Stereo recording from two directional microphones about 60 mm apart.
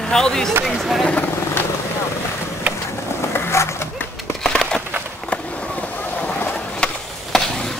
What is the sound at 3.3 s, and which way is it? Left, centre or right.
Skateboard, left.